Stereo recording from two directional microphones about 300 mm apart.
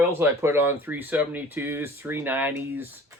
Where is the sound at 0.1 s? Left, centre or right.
Centre.